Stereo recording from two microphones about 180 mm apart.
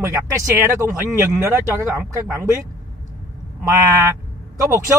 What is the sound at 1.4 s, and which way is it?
Speech, 15° right (ahead or behind).